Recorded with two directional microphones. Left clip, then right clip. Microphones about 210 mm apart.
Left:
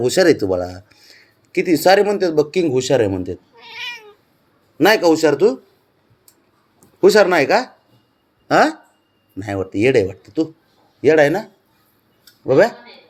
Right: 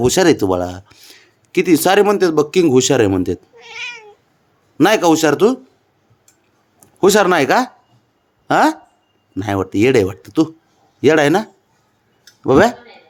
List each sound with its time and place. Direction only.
0.0 s speech: 25° right (ahead or behind)
3.5 s cat: 5° right (ahead or behind)
4.8 s speech: 35° right (ahead or behind)
7.0 s speech: 30° right (ahead or behind)
12.5 s speech: 40° right (ahead or behind)